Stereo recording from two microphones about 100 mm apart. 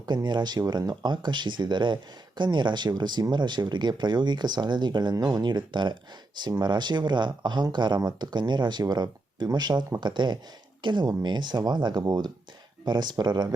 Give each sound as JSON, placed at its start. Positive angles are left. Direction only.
{"t": 0.0, "sound": "speech", "side_deg": -45}